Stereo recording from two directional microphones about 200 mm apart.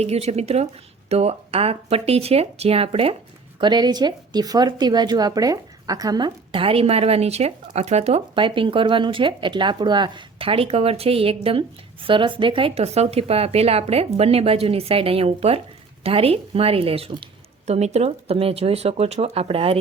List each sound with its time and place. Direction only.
0.0 s speech: 30° right (ahead or behind)